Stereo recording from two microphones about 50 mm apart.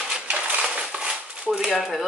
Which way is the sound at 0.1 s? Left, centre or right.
Centre.